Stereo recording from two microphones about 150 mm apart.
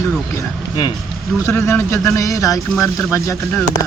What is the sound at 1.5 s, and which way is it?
Speech, 15° left (ahead or behind).